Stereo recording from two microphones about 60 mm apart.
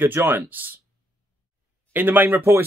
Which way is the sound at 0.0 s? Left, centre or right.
Right.